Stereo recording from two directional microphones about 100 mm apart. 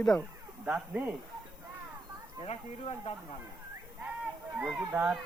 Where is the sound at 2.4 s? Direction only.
85° left.